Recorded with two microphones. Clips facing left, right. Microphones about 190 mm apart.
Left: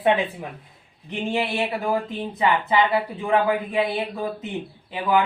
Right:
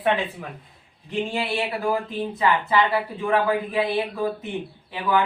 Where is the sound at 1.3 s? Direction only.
20° left (ahead or behind).